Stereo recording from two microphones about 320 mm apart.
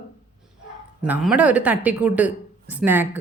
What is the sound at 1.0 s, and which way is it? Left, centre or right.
Speech, centre.